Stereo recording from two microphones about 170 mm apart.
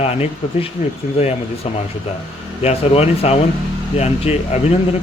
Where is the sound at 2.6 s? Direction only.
35° left (ahead or behind).